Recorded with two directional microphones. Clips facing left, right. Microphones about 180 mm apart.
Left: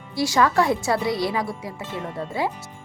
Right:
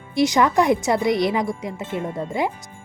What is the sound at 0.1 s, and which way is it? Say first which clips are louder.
Speech: right 3 dB; 20° right (ahead or behind).